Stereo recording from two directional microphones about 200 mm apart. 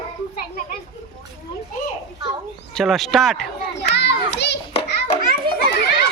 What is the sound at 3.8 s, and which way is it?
Children playing, 55° left (ahead or behind).